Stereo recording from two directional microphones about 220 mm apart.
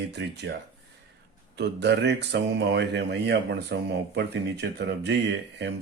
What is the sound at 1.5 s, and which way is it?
Speech, 50° right (ahead or behind).